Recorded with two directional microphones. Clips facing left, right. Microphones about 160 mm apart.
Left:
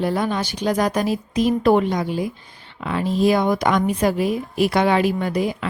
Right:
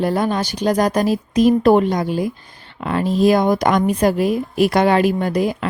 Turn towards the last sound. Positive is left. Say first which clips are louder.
# right 3 dB
turn(degrees=-45)  # may be behind; listen again after turning